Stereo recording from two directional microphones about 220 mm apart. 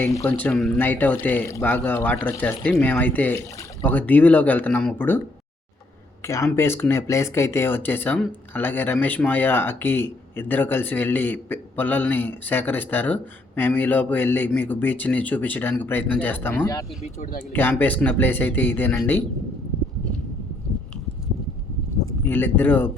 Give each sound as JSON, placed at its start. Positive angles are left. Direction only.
{"t": 0.0, "sound": "speech", "side_deg": 10}
{"t": 6.2, "sound": "speech", "side_deg": 15}
{"t": 17.0, "sound": "speech", "side_deg": 40}
{"t": 17.5, "sound": "speech", "side_deg": 10}
{"t": 22.2, "sound": "speech", "side_deg": 10}